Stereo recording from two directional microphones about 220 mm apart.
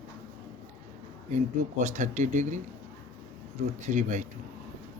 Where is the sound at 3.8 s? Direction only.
35° right (ahead or behind).